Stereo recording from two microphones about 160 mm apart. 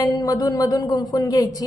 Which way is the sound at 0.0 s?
20° left (ahead or behind).